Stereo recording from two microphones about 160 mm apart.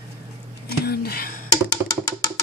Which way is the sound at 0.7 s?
75° left (ahead or behind).